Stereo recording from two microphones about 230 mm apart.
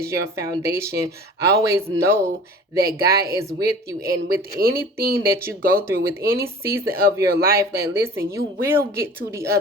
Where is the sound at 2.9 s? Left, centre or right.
Right.